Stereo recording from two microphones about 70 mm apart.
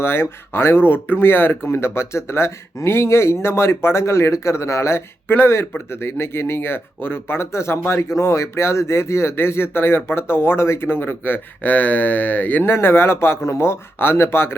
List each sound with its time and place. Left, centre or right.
0.0 s speech: left
12.7 s speech: left